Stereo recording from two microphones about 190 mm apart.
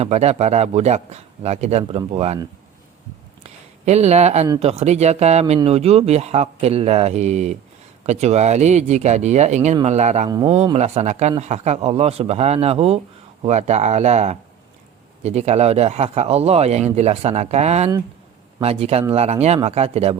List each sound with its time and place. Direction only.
0.0 s speech: 35° right (ahead or behind)
3.4 s a sound: 35° right (ahead or behind)
4.6 s speech: 30° right (ahead or behind)
10.2 s speech: 20° right (ahead or behind)
10.8 s speech: 35° right (ahead or behind)